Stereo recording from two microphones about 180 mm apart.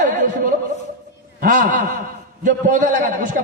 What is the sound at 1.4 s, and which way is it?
A man's voice, 45° right (ahead or behind).